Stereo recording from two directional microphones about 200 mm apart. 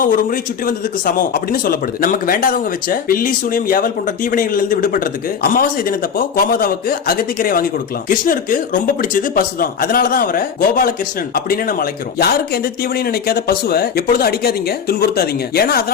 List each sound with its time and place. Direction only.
0.0 s speech: 45° left (ahead or behind)